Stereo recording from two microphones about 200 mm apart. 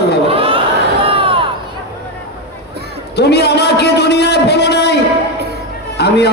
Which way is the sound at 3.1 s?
55° left (ahead or behind).